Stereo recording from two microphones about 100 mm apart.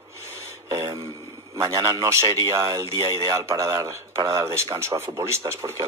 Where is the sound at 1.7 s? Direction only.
40° right (ahead or behind).